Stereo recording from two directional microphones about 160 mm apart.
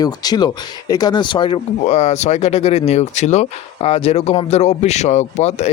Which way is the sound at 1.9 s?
45° left (ahead or behind).